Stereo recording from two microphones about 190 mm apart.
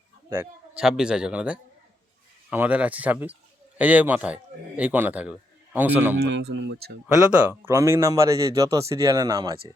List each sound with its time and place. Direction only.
0.3 s a man's voice: 10° right (ahead or behind)
6.1 s speech: 60° right (ahead or behind)
7.6 s a man's voice: 15° right (ahead or behind)